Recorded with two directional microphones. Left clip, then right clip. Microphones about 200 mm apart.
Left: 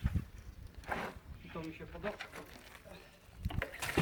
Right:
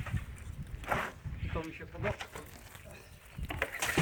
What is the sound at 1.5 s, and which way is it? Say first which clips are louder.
Speech: right 4 dB; 30° left (ahead or behind).